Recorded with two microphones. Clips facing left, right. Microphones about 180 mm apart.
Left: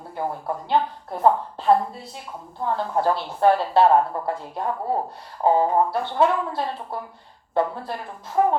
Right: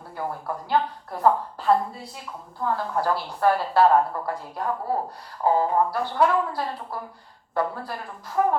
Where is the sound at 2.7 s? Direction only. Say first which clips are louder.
Left 4 dB; 25° left (ahead or behind).